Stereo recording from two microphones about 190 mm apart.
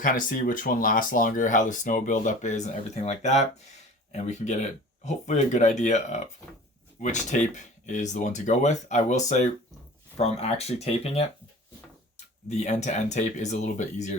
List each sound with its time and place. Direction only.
0.0 s speech: 45° left (ahead or behind)